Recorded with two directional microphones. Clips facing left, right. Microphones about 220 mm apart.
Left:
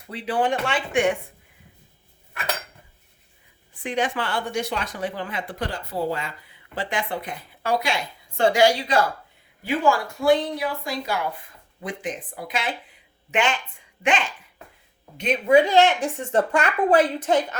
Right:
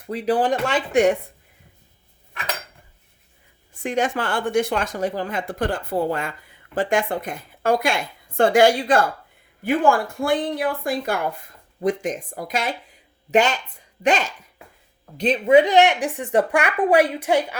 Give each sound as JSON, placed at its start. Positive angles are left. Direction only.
{"t": 0.1, "sound": "speech", "side_deg": -40}
{"t": 3.8, "sound": "speech", "side_deg": -45}
{"t": 15.5, "sound": "a woman's voice", "side_deg": -20}